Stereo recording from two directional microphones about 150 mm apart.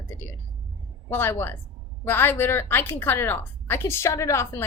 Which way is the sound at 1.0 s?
15° left (ahead or behind).